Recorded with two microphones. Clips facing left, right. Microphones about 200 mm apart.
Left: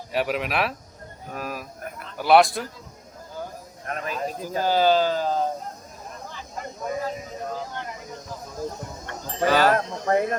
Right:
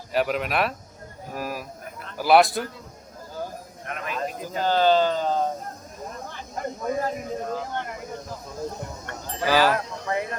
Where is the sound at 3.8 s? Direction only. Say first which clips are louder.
Left 3 dB; 35° left (ahead or behind).